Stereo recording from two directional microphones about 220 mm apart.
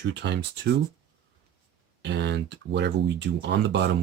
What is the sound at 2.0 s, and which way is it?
Speech, 50° right (ahead or behind).